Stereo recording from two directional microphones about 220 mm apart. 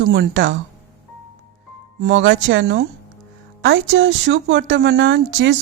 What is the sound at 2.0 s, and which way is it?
Speech, 55° right (ahead or behind).